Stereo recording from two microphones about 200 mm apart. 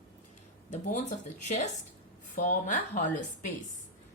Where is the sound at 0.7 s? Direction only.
35° left (ahead or behind).